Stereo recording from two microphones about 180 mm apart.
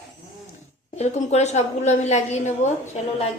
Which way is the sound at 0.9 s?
40° left (ahead or behind).